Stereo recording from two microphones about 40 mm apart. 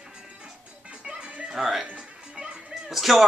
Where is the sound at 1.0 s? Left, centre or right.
Right.